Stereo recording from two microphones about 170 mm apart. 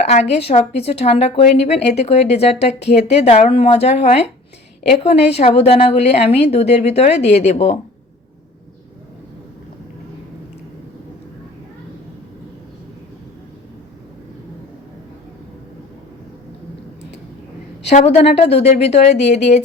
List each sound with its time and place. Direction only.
0.1 s a woman's voice: 40° left (ahead or behind)
17.8 s a woman's voice: 40° left (ahead or behind)